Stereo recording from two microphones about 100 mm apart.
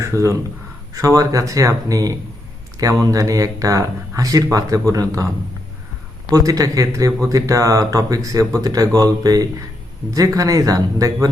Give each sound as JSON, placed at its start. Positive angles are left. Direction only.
{"t": 0.0, "sound": "speech", "side_deg": -30}
{"t": 6.3, "sound": "speech", "side_deg": -35}